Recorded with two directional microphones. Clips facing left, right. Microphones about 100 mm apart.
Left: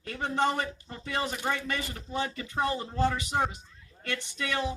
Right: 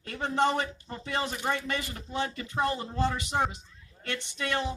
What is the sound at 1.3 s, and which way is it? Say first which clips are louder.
Speech: right 1 dB; 35° right (ahead or behind).